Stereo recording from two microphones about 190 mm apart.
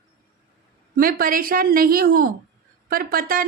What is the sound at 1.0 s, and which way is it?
Speech, 50° right (ahead or behind).